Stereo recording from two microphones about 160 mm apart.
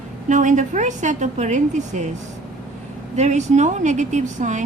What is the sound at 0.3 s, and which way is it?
Speech, 50° right (ahead or behind).